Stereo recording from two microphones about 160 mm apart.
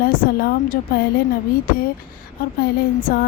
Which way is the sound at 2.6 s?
65° left (ahead or behind).